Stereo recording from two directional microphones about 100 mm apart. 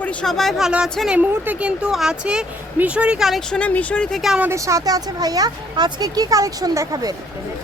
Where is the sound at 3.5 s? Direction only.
10° left (ahead or behind).